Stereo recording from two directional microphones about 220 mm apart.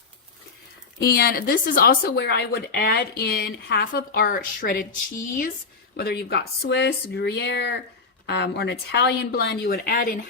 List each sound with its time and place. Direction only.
1.0 s speech: 45° left (ahead or behind)
6.0 s speech: 45° left (ahead or behind)